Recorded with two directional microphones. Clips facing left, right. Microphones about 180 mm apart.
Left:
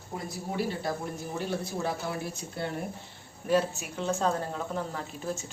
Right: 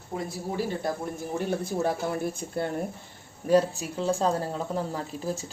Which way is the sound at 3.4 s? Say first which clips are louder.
Right 4 dB; 35° right (ahead or behind).